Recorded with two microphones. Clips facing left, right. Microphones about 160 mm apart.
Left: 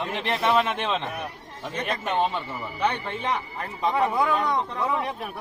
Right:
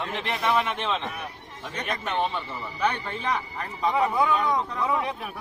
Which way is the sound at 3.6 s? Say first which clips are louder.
Even; 5° left (ahead or behind).